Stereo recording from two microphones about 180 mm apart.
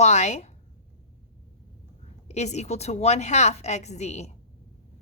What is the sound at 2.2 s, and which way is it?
A woman's voice, 40° left (ahead or behind).